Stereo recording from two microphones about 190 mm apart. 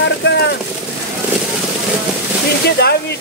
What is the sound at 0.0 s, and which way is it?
Vehicle, 70° left (ahead or behind).